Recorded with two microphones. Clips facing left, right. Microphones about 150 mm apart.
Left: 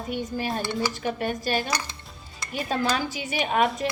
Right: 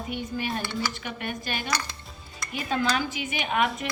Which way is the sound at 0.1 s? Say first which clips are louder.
Left 3 dB; 40° left (ahead or behind).